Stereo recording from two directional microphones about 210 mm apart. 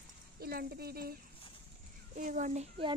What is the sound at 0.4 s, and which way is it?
Speech, 45° right (ahead or behind).